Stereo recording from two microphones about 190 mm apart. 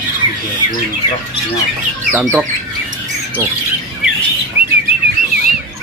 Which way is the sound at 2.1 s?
5° right (ahead or behind).